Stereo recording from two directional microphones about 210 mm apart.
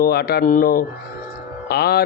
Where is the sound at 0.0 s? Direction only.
50° left (ahead or behind).